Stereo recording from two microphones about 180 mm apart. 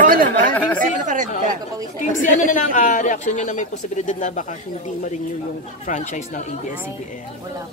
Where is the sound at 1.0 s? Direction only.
45° right (ahead or behind).